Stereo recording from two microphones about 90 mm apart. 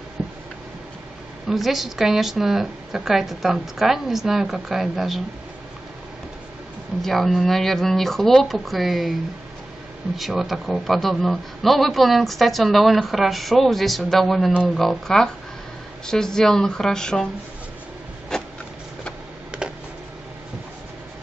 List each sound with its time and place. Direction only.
0.2 s tick-tock: 15° right (ahead or behind)
1.5 s a man's voice: centre (ahead or behind)
7.0 s a man's voice: 5° left (ahead or behind)
10.1 s a man's voice: centre (ahead or behind)
14.5 s speech: 10° right (ahead or behind)
14.8 s a man's voice: 5° left (ahead or behind)
18.3 s a sound: 5° left (ahead or behind)
19.5 s a sound: 10° right (ahead or behind)